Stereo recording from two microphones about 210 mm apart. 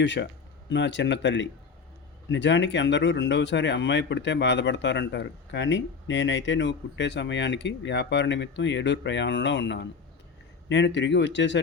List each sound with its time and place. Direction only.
0.0 s speech: 60° left (ahead or behind)